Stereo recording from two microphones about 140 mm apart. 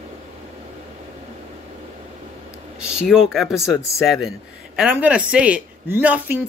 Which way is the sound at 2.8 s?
5° right (ahead or behind).